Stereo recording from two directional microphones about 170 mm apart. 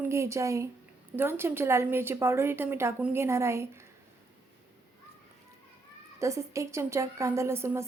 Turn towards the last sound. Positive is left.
turn(degrees=-15)  # may be behind; listen again after turning